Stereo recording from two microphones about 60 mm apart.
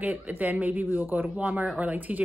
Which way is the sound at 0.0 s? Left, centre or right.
Right.